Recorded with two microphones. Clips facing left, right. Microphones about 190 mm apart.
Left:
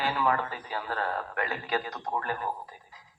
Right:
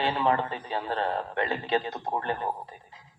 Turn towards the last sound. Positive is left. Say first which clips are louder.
# right 2 dB
turn(degrees=-25)  # may be behind; listen again after turning